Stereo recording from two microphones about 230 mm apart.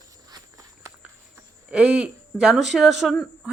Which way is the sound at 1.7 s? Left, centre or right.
Centre.